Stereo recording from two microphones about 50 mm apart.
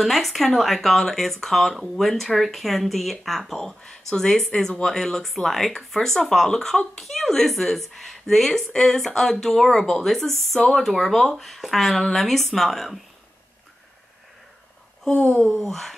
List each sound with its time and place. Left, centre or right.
0.0 s speech: centre
15.0 s a sound: left
15.5 s speech: centre